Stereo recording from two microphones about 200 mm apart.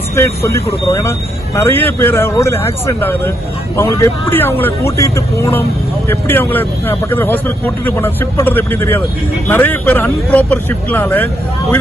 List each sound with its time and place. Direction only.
0.2 s speech: 15° left (ahead or behind)